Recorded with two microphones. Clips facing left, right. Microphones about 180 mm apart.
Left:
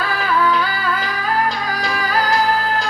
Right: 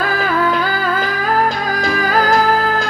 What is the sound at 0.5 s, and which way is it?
Music, 45° right (ahead or behind).